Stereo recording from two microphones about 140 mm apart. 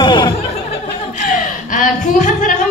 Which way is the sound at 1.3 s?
70° left (ahead or behind).